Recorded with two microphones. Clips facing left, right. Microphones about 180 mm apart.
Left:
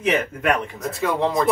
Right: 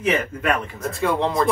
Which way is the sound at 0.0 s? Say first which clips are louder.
Left 1 dB; 15° left (ahead or behind).